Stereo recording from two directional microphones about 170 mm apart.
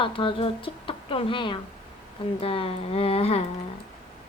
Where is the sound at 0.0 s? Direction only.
30° left (ahead or behind).